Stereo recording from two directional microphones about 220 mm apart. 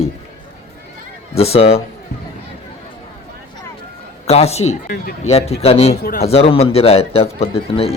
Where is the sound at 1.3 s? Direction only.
25° left (ahead or behind).